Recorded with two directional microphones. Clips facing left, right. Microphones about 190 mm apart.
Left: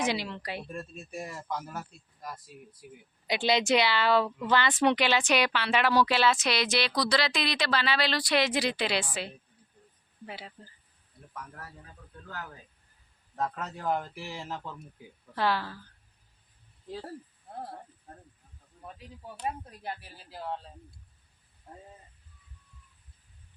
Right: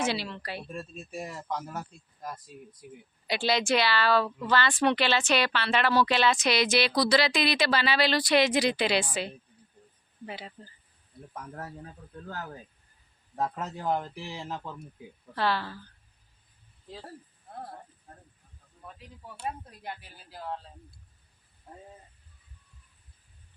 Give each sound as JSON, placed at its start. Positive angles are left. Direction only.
{"t": 0.0, "sound": "a woman's voice", "side_deg": 15}
{"t": 1.5, "sound": "a woman's voice", "side_deg": 5}
{"t": 3.2, "sound": "a woman's voice", "side_deg": 20}
{"t": 12.3, "sound": "speech", "side_deg": -35}
{"t": 13.8, "sound": "a woman's voice", "side_deg": 0}
{"t": 14.3, "sound": "speech", "side_deg": -15}
{"t": 15.4, "sound": "a woman's voice", "side_deg": 10}